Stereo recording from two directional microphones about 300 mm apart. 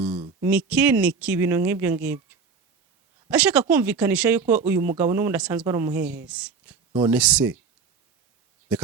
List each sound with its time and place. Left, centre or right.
0.1 s a sound: centre
0.4 s speech: centre
3.2 s speech: centre